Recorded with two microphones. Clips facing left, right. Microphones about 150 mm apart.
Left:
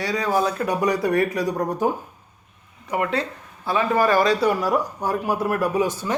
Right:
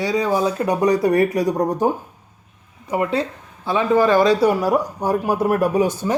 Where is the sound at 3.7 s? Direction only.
20° right (ahead or behind).